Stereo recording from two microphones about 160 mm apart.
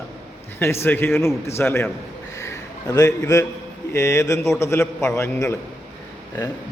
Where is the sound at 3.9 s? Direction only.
20° left (ahead or behind).